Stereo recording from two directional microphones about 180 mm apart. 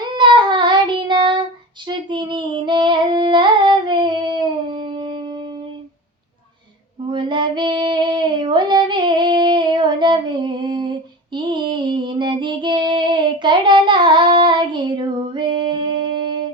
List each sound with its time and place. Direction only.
0.1 s child singing: 25° right (ahead or behind)
7.1 s female singing: 25° right (ahead or behind)
13.4 s child singing: 25° right (ahead or behind)